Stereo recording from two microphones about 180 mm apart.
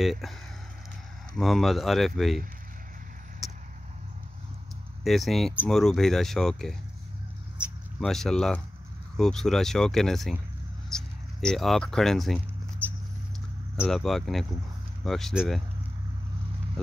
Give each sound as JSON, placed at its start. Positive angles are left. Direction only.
{"t": 0.0, "sound": "speech", "side_deg": 0}
{"t": 1.3, "sound": "speech", "side_deg": 0}
{"t": 3.4, "sound": "vehicle", "side_deg": 0}
{"t": 5.0, "sound": "speech", "side_deg": 0}
{"t": 8.0, "sound": "speech", "side_deg": 0}
{"t": 10.9, "sound": "a sound", "side_deg": 5}
{"t": 13.8, "sound": "speech", "side_deg": 0}
{"t": 16.8, "sound": "speech", "side_deg": 5}